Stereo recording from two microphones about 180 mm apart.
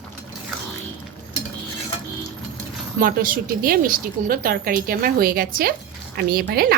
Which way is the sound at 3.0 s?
55° right (ahead or behind).